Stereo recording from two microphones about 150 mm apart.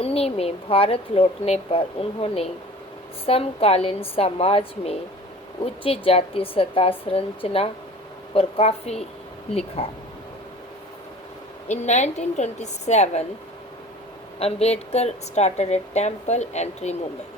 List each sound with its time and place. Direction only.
0.0 s speech: 40° left (ahead or behind)
11.7 s a woman's voice: 50° left (ahead or behind)
14.3 s a woman's voice: 45° left (ahead or behind)